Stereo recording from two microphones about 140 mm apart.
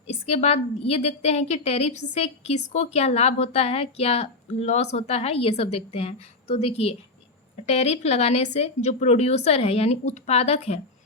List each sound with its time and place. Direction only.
0.3 s a woman's voice: 50° left (ahead or behind)